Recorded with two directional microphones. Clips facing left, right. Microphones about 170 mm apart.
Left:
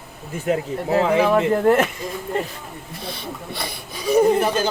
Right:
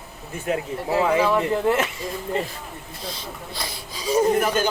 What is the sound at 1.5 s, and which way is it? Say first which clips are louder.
Speech: left 5 dB; 55° left (ahead or behind).